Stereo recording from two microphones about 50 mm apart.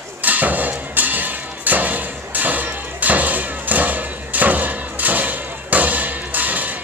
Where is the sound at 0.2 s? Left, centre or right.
Right.